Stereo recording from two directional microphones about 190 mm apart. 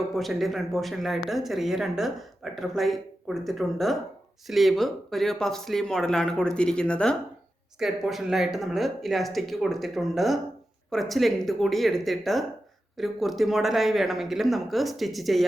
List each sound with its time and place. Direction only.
0.1 s speech: centre (ahead or behind)